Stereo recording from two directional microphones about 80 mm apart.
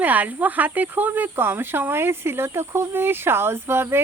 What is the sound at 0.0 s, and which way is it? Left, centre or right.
Speech, right.